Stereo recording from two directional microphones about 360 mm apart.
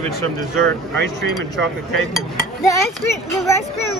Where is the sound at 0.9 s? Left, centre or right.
Right.